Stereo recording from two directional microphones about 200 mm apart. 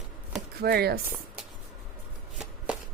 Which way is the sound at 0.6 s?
50° right (ahead or behind).